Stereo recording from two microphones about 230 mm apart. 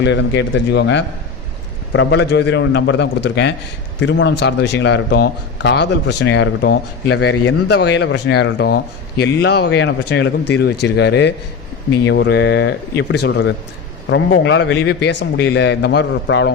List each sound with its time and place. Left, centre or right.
0.0 s speech: left